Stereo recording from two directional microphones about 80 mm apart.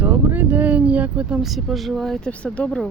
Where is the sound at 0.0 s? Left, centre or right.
Right.